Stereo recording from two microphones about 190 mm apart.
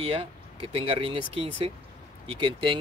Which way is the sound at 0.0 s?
30° right (ahead or behind).